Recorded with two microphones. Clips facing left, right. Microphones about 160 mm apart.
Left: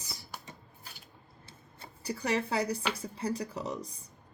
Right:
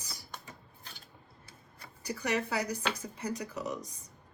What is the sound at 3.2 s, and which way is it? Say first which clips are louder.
Speech: left 2 dB; 30° left (ahead or behind).